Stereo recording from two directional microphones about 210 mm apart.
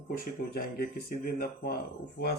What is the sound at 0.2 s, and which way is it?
Speech, 45° left (ahead or behind).